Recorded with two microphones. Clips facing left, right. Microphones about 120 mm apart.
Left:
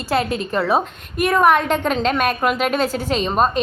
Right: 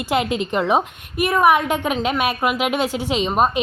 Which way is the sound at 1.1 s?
5° right (ahead or behind).